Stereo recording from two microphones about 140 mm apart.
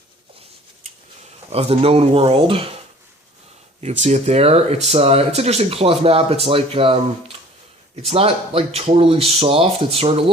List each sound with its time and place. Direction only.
1.5 s speech: 45° right (ahead or behind)
3.8 s speech: 55° right (ahead or behind)
8.0 s speech: 40° right (ahead or behind)